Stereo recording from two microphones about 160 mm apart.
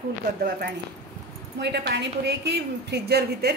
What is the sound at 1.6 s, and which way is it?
A woman's voice, 90° right.